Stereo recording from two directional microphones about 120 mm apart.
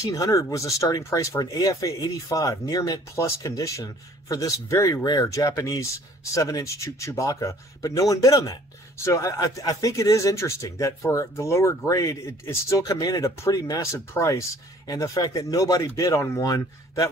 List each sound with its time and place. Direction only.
0.0 s speech: 25° left (ahead or behind)